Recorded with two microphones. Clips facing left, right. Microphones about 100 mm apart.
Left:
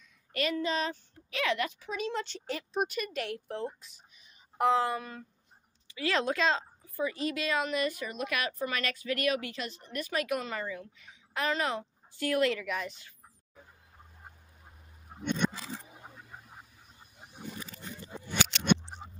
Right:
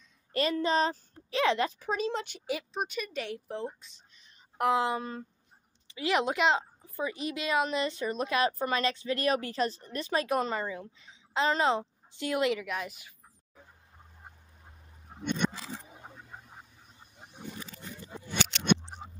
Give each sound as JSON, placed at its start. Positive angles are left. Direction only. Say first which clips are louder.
{"t": 0.3, "sound": "a child's voice", "louder": "right 3 dB", "side_deg": -30}
{"t": 2.2, "sound": "a woman's voice", "louder": "right 3 dB", "side_deg": -10}
{"t": 2.7, "sound": "speech", "louder": "left 2 dB", "side_deg": 0}
{"t": 4.8, "sound": "a woman's voice", "louder": "right 2 dB", "side_deg": -25}
{"t": 12.6, "sound": "a woman's voice", "louder": "even", "side_deg": -5}
{"t": 15.1, "sound": "a sound", "louder": "even", "side_deg": 5}
{"t": 18.9, "sound": "a sound", "louder": "right 1 dB", "side_deg": -5}